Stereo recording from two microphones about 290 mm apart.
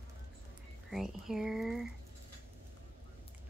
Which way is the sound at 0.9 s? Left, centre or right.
Centre.